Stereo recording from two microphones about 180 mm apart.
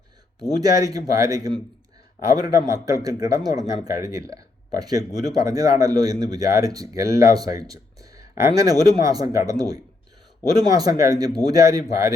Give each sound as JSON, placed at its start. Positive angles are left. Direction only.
{"t": 0.4, "sound": "speech", "side_deg": -20}